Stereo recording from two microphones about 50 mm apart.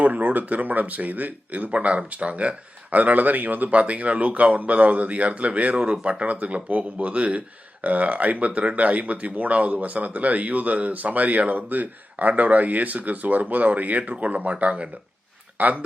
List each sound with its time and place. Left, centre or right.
0.0 s speech: right